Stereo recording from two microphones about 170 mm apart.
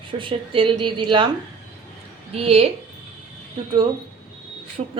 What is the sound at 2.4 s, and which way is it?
Speech, 35° right (ahead or behind).